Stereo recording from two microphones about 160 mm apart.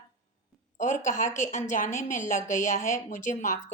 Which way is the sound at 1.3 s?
50° left (ahead or behind).